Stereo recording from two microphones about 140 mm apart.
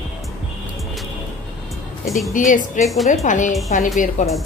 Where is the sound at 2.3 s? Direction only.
65° left (ahead or behind).